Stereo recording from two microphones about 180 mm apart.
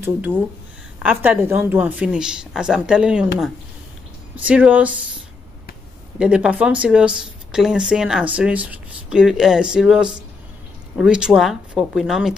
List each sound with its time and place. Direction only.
0.0 s speech: 10° right (ahead or behind)
4.5 s speech: 5° right (ahead or behind)
6.1 s speech: 5° right (ahead or behind)